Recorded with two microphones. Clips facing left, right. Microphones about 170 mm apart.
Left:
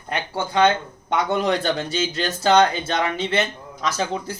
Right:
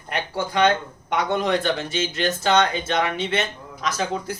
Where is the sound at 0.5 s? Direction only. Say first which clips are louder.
Left 2 dB; 30° left (ahead or behind).